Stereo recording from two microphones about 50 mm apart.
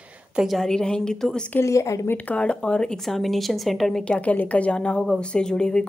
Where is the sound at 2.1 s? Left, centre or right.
Left.